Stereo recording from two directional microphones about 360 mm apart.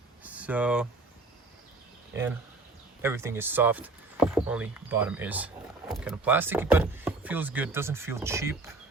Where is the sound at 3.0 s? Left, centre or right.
Centre.